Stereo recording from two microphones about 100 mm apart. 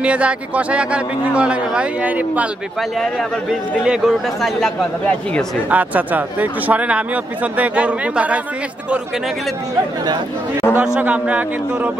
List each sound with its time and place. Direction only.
0.0 s a man's voice: 10° right (ahead or behind)
3.8 s a man's voice: 10° right (ahead or behind)
5.7 s a man's voice: 15° right (ahead or behind)
10.7 s a man's voice: 15° right (ahead or behind)